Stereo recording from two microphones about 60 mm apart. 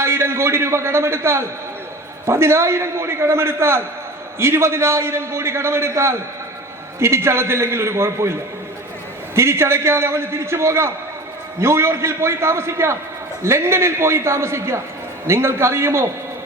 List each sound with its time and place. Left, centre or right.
0.0 s a man's voice: right
9.3 s a man's voice: right